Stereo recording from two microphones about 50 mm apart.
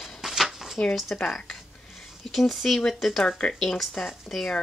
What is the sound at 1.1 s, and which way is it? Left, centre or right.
Speech, left.